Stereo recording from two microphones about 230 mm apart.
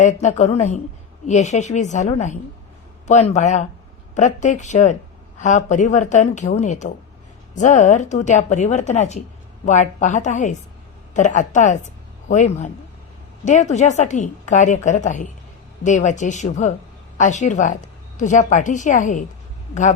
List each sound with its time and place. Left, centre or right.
0.0 s a woman's voice: left